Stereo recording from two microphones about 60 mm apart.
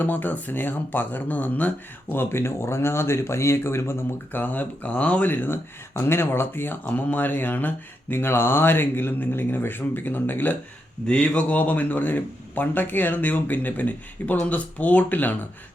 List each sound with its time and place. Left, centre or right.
0.0 s speech: left
4.4 s speech: left
5.3 s speech: left
11.0 s speech: centre